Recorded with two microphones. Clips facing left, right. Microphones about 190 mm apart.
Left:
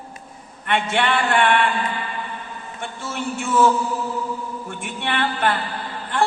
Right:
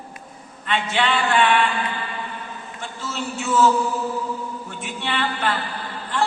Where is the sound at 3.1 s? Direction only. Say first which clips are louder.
Left 1 dB; 55° left (ahead or behind).